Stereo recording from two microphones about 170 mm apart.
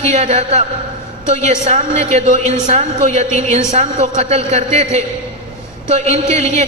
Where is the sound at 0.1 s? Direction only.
40° right (ahead or behind).